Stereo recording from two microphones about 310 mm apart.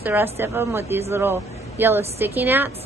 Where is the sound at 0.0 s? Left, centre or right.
Centre.